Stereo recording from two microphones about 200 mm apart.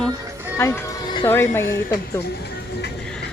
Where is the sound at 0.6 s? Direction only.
15° left (ahead or behind).